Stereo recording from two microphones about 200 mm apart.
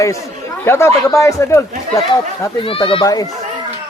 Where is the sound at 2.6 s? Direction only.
25° left (ahead or behind).